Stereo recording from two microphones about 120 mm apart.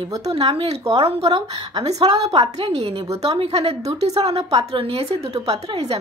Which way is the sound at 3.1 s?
30° right (ahead or behind).